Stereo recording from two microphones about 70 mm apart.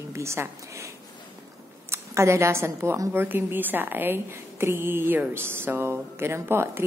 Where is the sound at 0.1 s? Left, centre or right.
Right.